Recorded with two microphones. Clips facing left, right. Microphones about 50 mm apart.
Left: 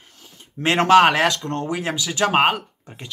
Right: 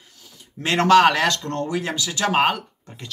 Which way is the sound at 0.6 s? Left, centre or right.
Left.